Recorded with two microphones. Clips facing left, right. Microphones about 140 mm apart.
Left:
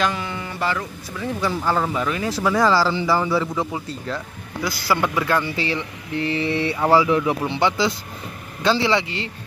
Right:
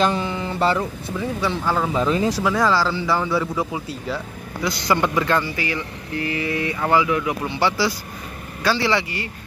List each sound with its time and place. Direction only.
0.0 s speech: 30° right (ahead or behind)
1.4 s a man's voice: 5° left (ahead or behind)
2.0 s speech: 25° right (ahead or behind)
2.4 s a man's voice: centre (ahead or behind)
3.5 s speech: 5° right (ahead or behind)
4.6 s speech: 5° left (ahead or behind)
5.6 s speech: 25° left (ahead or behind)